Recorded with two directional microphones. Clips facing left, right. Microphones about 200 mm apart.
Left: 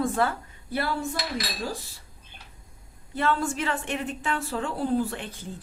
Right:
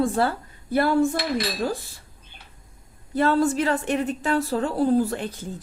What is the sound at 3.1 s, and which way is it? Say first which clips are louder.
A woman's voice: right 6 dB; 40° right (ahead or behind).